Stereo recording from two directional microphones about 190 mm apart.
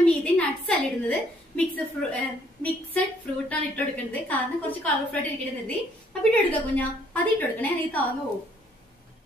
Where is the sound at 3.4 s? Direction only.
5° left (ahead or behind).